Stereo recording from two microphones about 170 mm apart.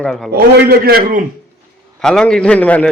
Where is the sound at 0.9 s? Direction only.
60° right (ahead or behind).